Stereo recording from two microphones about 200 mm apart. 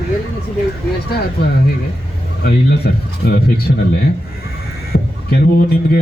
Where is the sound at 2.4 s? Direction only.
50° left (ahead or behind).